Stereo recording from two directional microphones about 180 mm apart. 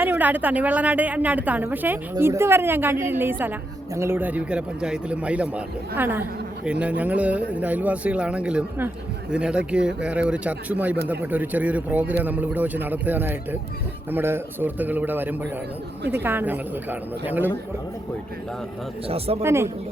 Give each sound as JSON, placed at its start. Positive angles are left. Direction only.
{"t": 0.0, "sound": "a woman's voice", "side_deg": -10}
{"t": 19.0, "sound": "speech", "side_deg": -35}
{"t": 19.4, "sound": "a woman's voice", "side_deg": -15}